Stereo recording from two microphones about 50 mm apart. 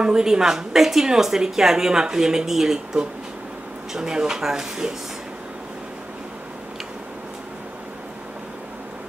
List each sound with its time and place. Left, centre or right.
0.0 s a woman's voice: centre